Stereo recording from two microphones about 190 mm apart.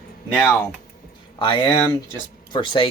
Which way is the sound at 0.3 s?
10° left (ahead or behind).